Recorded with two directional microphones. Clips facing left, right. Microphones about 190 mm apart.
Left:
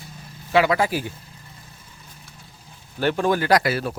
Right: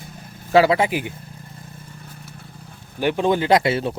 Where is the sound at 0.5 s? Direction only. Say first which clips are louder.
Right 4 dB; 35° right (ahead or behind).